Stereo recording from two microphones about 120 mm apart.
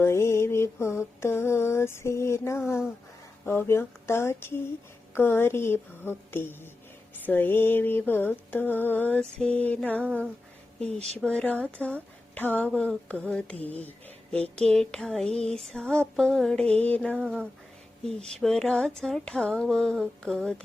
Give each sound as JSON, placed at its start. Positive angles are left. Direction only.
{"t": 0.0, "sound": "mantra", "side_deg": 20}
{"t": 7.3, "sound": "a woman's voice", "side_deg": 15}
{"t": 11.3, "sound": "a woman's voice", "side_deg": 10}
{"t": 18.3, "sound": "a sound", "side_deg": 5}